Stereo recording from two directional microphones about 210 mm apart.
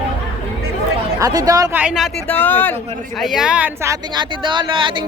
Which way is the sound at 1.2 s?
15° right (ahead or behind).